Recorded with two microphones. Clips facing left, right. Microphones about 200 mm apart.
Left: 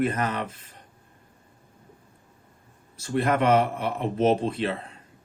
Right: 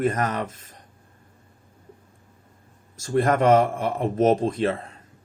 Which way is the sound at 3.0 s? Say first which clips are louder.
Right 3 dB; 45° right (ahead or behind).